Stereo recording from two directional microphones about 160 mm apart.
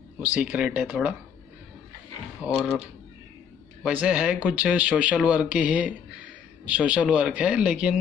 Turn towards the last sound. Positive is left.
turn(degrees=-5)  # may be behind; listen again after turning